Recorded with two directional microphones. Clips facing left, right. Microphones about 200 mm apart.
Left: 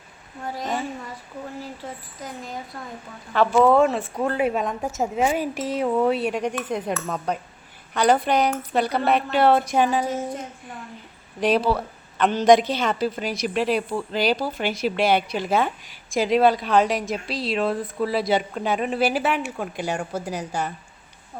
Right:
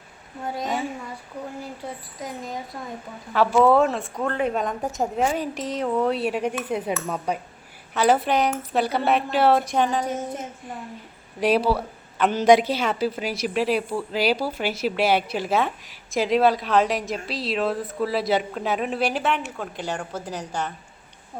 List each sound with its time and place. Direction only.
0.6 s a woman's voice: centre (ahead or behind)
3.3 s a woman's voice: 5° right (ahead or behind)
11.3 s a woman's voice: 5° right (ahead or behind); by 20.7 s 10° left (ahead or behind)